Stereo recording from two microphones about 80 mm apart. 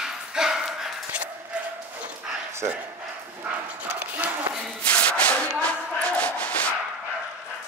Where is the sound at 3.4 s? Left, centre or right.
Centre.